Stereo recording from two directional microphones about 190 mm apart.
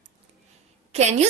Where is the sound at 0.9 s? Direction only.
35° right (ahead or behind).